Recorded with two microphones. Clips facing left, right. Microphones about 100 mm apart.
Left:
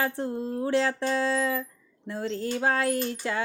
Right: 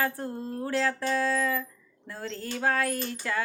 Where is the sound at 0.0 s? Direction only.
20° left (ahead or behind).